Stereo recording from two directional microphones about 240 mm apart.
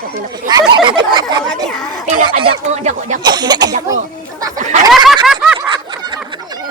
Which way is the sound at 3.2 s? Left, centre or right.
Centre.